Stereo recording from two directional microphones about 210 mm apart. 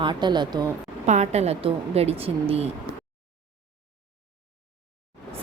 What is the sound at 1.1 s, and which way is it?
A woman's voice, 30° right (ahead or behind).